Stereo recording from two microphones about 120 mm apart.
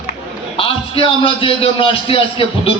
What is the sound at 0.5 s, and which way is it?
A man's voice, 50° left (ahead or behind).